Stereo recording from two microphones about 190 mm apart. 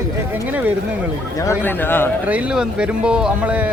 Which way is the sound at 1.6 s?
10° left (ahead or behind).